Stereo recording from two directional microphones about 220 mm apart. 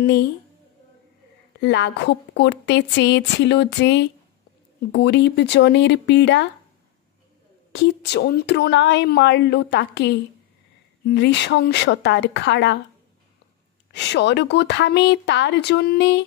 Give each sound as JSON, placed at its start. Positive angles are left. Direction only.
{"t": 1.6, "sound": "a woman's voice", "side_deg": 55}
{"t": 7.7, "sound": "a woman's voice", "side_deg": 50}
{"t": 13.9, "sound": "a woman's voice", "side_deg": 50}